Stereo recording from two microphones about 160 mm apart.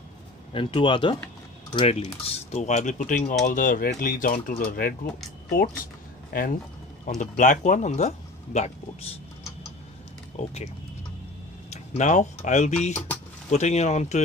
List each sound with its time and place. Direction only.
0.5 s speech: 35° left (ahead or behind); by 4.9 s 60° left (ahead or behind)
6.3 s speech: 60° left (ahead or behind); by 9.2 s 45° left (ahead or behind)
10.3 s speech: 45° left (ahead or behind)
11.7 s speech: 45° left (ahead or behind)